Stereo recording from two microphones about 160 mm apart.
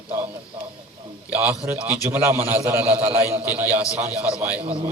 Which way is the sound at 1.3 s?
10° right (ahead or behind).